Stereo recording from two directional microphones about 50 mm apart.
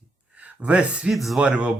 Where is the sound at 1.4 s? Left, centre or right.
Right.